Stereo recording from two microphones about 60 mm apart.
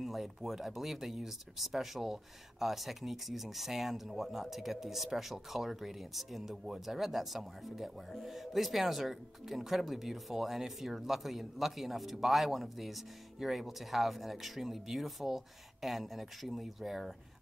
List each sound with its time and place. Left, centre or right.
0.0 s speech: centre